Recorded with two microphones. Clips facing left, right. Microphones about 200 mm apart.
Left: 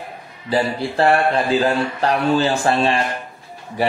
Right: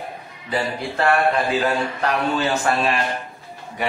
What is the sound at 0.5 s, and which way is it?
A man's voice, 30° left (ahead or behind).